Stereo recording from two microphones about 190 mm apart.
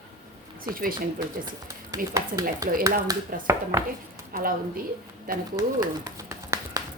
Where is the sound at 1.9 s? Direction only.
15° right (ahead or behind).